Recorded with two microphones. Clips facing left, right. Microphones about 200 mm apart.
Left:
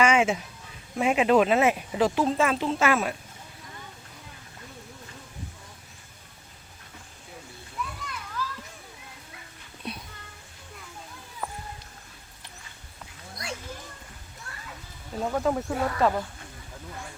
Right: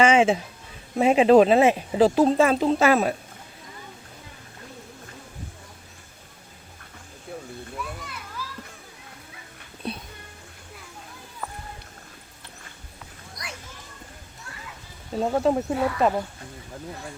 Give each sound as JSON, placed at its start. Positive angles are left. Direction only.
{"t": 0.0, "sound": "music", "side_deg": -30}
{"t": 0.9, "sound": "speech", "side_deg": -30}
{"t": 8.4, "sound": "children playing", "side_deg": -5}
{"t": 9.8, "sound": "a sound", "side_deg": -30}
{"t": 11.4, "sound": "cat", "side_deg": 10}
{"t": 15.2, "sound": "speech", "side_deg": -35}
{"t": 15.5, "sound": "speech", "side_deg": -20}